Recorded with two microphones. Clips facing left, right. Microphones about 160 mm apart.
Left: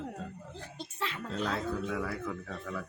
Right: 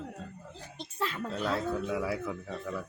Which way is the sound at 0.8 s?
40° right (ahead or behind).